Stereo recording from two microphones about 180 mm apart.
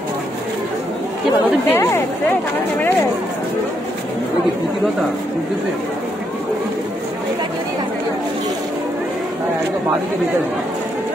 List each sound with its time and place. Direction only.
1.7 s speech: 15° left (ahead or behind)